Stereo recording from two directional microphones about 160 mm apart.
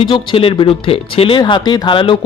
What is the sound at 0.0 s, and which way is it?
Speech, 30° left (ahead or behind).